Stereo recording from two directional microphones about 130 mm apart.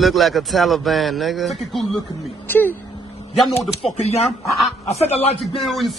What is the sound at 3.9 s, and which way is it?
Speech, 55° left (ahead or behind).